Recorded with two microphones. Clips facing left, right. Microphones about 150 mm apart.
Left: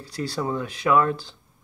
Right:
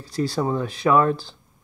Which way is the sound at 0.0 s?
40° right (ahead or behind).